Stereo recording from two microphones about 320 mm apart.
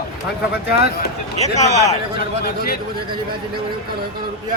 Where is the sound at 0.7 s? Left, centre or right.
Left.